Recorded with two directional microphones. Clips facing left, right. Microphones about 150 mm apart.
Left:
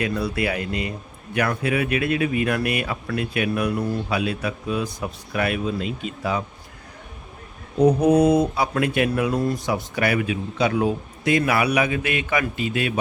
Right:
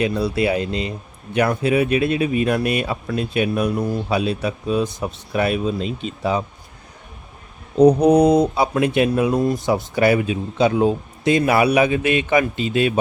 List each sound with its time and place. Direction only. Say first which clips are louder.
0.0 s speech: right 4 dB; 25° right (ahead or behind)
7.8 s speech: right 4 dB; 20° right (ahead or behind)